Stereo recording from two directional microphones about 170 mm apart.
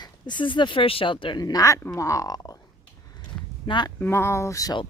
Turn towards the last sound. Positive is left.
turn(degrees=20)  # may be behind; listen again after turning